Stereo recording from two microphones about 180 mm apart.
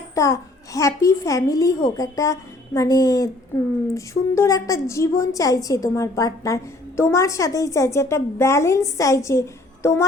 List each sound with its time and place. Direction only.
0.1 s a woman's voice: 15° left (ahead or behind)